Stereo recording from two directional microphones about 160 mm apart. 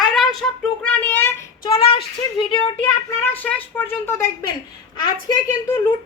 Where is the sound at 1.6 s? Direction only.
35° left (ahead or behind).